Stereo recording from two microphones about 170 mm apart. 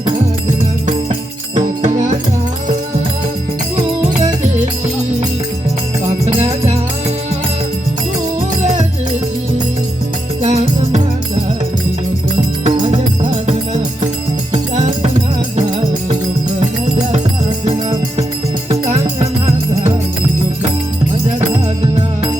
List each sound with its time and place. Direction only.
1.5 s music: 45° right (ahead or behind)
3.8 s music: 25° right (ahead or behind)
6.1 s music: 40° right (ahead or behind)
10.4 s music: 40° right (ahead or behind)
12.6 s music: 40° right (ahead or behind)